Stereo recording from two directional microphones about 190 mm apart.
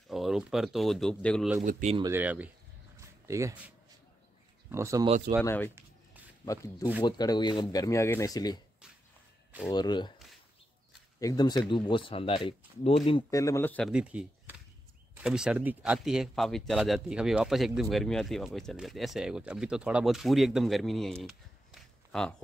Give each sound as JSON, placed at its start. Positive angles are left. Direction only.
{"t": 0.1, "sound": "speech", "side_deg": 0}
{"t": 1.6, "sound": "speech", "side_deg": -40}
{"t": 2.0, "sound": "speech", "side_deg": -15}
{"t": 3.0, "sound": "a sound", "side_deg": -15}
{"t": 4.6, "sound": "speech", "side_deg": -15}
{"t": 5.4, "sound": "speech", "side_deg": 15}
{"t": 9.7, "sound": "speech", "side_deg": 20}
{"t": 11.1, "sound": "speech", "side_deg": 20}
{"t": 13.3, "sound": "speech", "side_deg": 15}
{"t": 13.9, "sound": "speech", "side_deg": -5}